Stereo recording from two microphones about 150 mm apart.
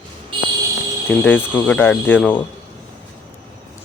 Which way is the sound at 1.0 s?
10° left (ahead or behind).